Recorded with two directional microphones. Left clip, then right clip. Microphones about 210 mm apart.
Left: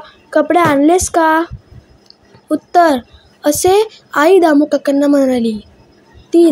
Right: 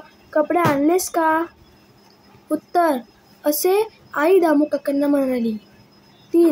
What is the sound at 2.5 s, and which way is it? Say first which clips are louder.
A woman's voice: left 8 dB; 25° left (ahead or behind).